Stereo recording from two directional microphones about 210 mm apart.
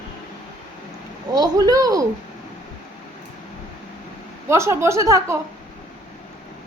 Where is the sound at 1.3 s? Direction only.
20° right (ahead or behind).